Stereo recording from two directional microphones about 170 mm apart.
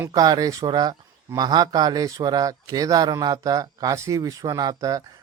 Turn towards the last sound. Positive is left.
turn(degrees=-20)  # may be behind; listen again after turning